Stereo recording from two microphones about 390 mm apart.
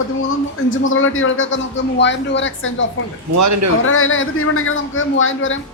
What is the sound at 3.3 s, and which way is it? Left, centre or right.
Speech, right.